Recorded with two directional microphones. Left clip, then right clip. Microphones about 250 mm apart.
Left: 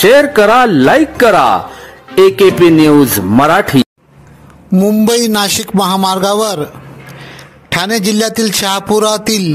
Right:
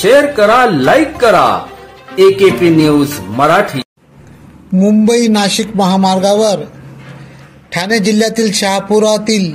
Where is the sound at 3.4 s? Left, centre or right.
Left.